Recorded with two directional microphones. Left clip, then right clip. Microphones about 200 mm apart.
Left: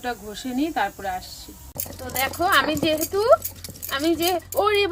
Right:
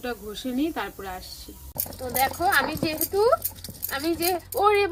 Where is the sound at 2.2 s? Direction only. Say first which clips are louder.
Left 2 dB; 25° left (ahead or behind).